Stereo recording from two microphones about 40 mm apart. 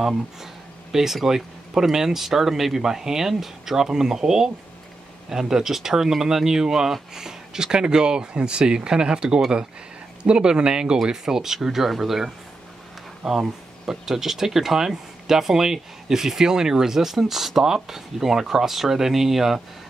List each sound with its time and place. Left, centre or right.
0.0 s speech: centre
13.3 s speech: centre